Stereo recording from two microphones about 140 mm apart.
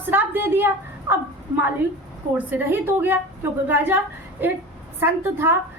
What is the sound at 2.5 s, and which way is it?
A woman's voice, 15° right (ahead or behind).